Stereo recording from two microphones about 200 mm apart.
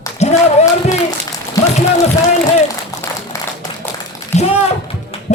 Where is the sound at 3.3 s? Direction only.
15° left (ahead or behind).